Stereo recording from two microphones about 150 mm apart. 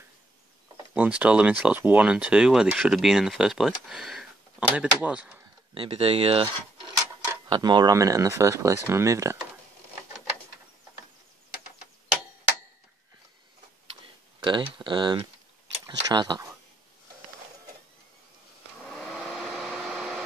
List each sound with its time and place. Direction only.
0.9 s speech: 10° right (ahead or behind)
5.8 s speech: 40° right (ahead or behind)
7.4 s speech: 30° right (ahead or behind)
14.4 s speech: 30° right (ahead or behind)
18.9 s a sound: centre (ahead or behind)